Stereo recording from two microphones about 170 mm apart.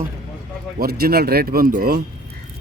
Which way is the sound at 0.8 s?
65° right (ahead or behind).